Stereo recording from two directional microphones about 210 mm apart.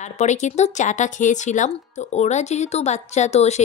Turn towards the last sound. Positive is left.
turn(degrees=30)  # may be behind; listen again after turning